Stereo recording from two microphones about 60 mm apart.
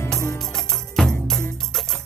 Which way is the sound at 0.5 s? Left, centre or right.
Centre.